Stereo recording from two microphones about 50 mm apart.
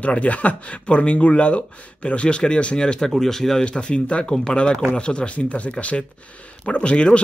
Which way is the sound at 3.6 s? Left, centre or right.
Centre.